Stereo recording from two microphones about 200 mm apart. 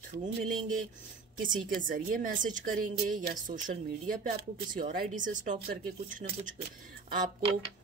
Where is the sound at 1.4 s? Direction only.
40° right (ahead or behind).